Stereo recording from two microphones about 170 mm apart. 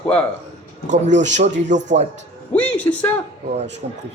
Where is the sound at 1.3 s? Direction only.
45° right (ahead or behind).